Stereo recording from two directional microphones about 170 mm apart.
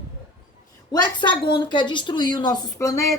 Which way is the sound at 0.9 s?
25° left (ahead or behind).